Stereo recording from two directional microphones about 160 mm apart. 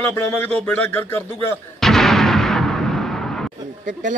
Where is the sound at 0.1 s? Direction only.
10° left (ahead or behind).